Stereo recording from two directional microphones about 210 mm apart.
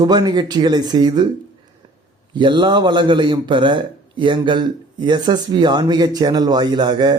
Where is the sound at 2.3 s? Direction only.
20° right (ahead or behind).